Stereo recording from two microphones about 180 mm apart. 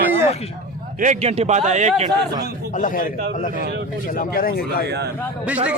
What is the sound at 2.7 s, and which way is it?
Speech, 50° left (ahead or behind).